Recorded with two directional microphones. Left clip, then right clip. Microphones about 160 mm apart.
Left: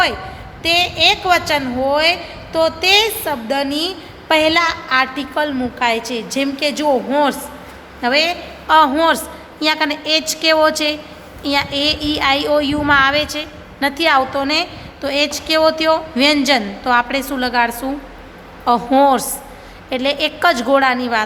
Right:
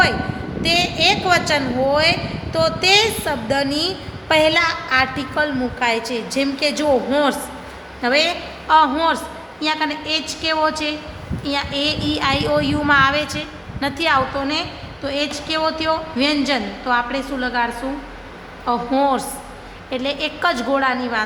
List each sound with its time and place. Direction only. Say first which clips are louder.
0.6 s a woman's voice: left 3 dB; 20° left (ahead or behind)